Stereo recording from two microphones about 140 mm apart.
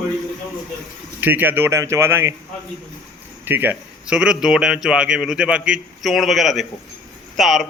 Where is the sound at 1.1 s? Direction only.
15° right (ahead or behind).